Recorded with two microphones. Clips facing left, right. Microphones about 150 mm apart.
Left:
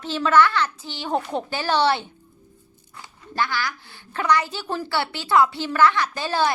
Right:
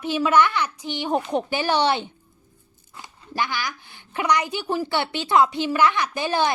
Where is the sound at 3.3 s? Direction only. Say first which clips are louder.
Left 1 dB; 15° right (ahead or behind).